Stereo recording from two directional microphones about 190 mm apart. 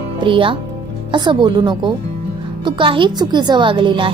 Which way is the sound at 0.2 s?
25° right (ahead or behind).